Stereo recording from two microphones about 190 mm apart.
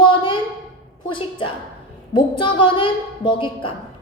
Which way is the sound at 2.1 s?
25° left (ahead or behind).